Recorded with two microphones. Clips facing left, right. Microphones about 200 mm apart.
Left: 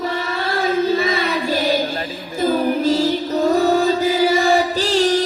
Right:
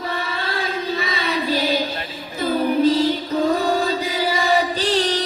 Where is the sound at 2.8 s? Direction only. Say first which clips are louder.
Even; 45° left (ahead or behind).